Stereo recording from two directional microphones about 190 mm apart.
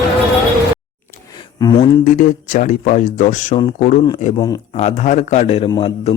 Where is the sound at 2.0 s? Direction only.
40° left (ahead or behind).